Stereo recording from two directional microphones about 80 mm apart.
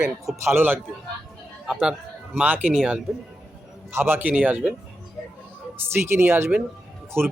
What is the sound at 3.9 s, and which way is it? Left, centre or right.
Speech, right.